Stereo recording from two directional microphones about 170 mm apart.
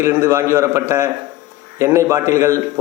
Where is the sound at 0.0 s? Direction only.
15° right (ahead or behind).